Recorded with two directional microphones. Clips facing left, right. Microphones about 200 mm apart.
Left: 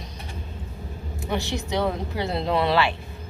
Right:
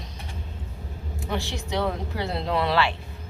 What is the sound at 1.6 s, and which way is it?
Speech, 20° left (ahead or behind).